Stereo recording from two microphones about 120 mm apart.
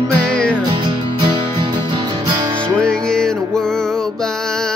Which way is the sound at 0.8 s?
40° right (ahead or behind).